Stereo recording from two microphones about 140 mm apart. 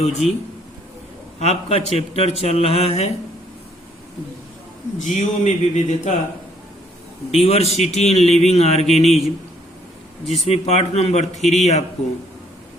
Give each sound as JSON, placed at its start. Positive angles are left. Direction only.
{"t": 0.0, "sound": "a man's voice", "side_deg": 50}
{"t": 1.4, "sound": "a man's voice", "side_deg": 50}
{"t": 4.9, "sound": "a man's voice", "side_deg": 65}
{"t": 7.3, "sound": "a man's voice", "side_deg": 45}
{"t": 10.2, "sound": "a man's voice", "side_deg": 50}